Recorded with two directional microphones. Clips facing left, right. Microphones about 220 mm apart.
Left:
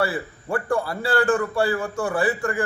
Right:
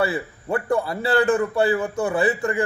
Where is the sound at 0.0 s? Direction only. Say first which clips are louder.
Right 1 dB; 20° right (ahead or behind).